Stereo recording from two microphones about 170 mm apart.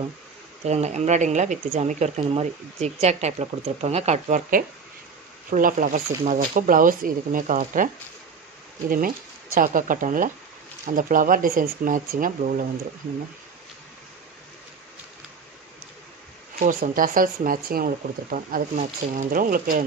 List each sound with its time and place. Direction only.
0.7 s speech: 40° right (ahead or behind)
16.5 s speech: 50° right (ahead or behind)